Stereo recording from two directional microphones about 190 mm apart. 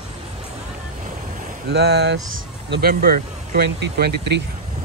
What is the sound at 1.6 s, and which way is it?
Speech, 60° right (ahead or behind).